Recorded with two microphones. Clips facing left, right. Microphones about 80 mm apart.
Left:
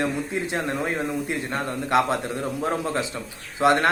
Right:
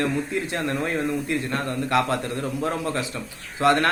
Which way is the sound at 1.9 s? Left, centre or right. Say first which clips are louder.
Left 2 dB; left.